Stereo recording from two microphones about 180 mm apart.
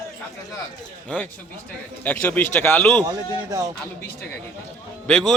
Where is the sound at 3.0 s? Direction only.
20° right (ahead or behind).